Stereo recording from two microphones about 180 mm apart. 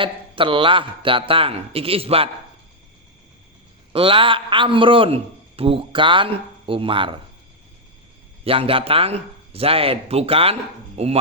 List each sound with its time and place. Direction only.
0.0 s speech: 30° right (ahead or behind)
3.9 s a man's voice: 30° right (ahead or behind)
8.4 s speech: 30° right (ahead or behind)